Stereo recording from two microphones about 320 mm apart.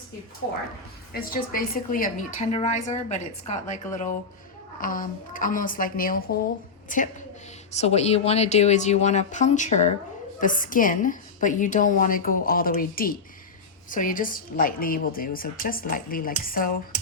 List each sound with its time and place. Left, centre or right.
1.3 s a woman's voice: left